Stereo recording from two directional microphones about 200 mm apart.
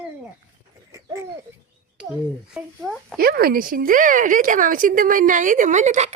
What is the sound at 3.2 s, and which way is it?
A woman's voice, 50° right (ahead or behind).